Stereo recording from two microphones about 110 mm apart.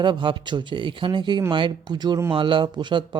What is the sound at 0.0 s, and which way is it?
Speech, 45° right (ahead or behind).